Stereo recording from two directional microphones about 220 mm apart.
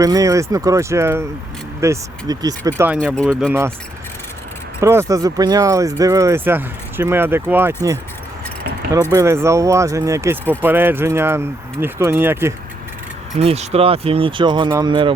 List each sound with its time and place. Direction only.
0.0 s speech: 15° right (ahead or behind)
4.8 s speech: 10° right (ahead or behind)
8.9 s speech: 15° right (ahead or behind)
13.4 s speech: 30° right (ahead or behind)